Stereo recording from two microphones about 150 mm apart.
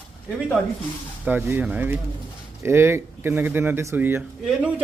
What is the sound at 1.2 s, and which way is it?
Speech, 15° right (ahead or behind).